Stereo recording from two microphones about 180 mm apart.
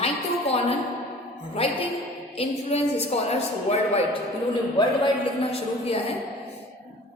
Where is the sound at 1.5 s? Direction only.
35° left (ahead or behind).